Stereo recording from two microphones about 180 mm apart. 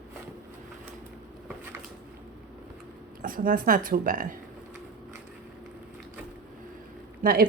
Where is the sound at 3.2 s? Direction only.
50° right (ahead or behind).